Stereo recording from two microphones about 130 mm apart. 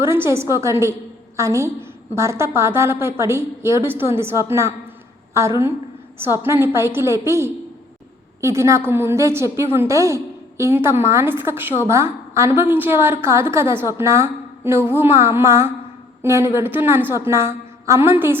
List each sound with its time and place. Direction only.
0.0 s a woman's voice: 20° right (ahead or behind)